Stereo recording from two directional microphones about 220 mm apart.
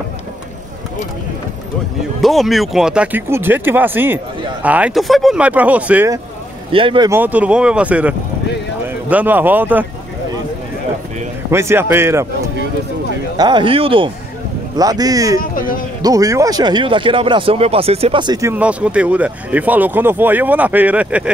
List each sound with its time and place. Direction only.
2.2 s speech: centre (ahead or behind)
6.7 s speech: 25° right (ahead or behind)
7.1 s speech: 10° right (ahead or behind)
11.5 s speech: 10° right (ahead or behind)
13.4 s speech: 20° right (ahead or behind)
15.5 s speech: 40° left (ahead or behind)
16.0 s speech: 15° right (ahead or behind)